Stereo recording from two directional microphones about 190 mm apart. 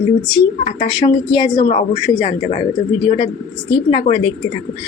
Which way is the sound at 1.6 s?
40° left (ahead or behind).